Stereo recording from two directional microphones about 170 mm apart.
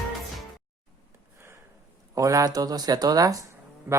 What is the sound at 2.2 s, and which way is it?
Speech, 20° right (ahead or behind).